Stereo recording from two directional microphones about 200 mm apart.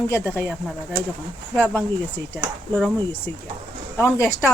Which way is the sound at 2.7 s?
10° left (ahead or behind).